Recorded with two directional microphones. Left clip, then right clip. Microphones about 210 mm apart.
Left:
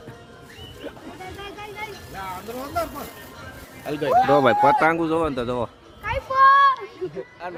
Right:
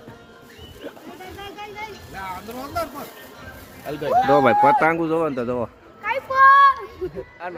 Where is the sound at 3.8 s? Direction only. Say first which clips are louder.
Left 2 dB; 55° left (ahead or behind).